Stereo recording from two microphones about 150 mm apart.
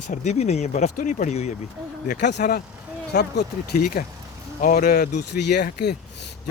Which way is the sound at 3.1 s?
90° left.